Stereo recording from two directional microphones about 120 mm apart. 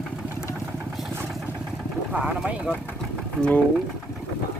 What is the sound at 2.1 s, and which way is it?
Speech, 10° right (ahead or behind).